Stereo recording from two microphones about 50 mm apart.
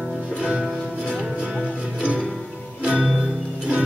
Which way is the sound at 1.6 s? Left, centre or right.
Right.